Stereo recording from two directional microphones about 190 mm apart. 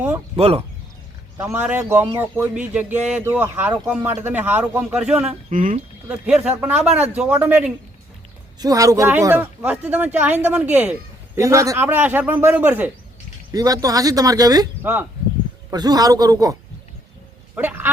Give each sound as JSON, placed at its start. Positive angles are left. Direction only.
{"t": 0.3, "sound": "speech", "side_deg": -30}
{"t": 1.4, "sound": "speech", "side_deg": -10}
{"t": 5.5, "sound": "speech", "side_deg": -45}
{"t": 6.1, "sound": "speech", "side_deg": -5}
{"t": 6.8, "sound": "speech", "side_deg": -35}
{"t": 7.1, "sound": "speech", "side_deg": -5}
{"t": 8.5, "sound": "speech", "side_deg": -20}